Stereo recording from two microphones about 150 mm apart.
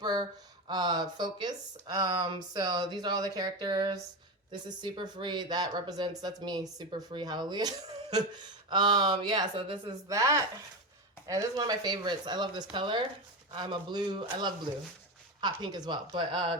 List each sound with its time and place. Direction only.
0.0 s a sound: 25° right (ahead or behind)
0.7 s speech: 30° right (ahead or behind)
8.7 s speech: 30° right (ahead or behind)
10.1 s speech: 20° right (ahead or behind)